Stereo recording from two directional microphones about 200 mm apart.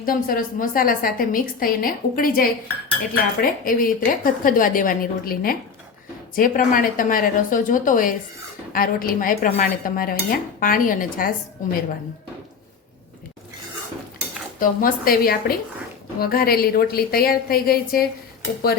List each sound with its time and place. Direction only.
0.0 s dishes: 45° left (ahead or behind)
11.6 s a woman's voice: 40° left (ahead or behind)
14.6 s dishes: 45° left (ahead or behind)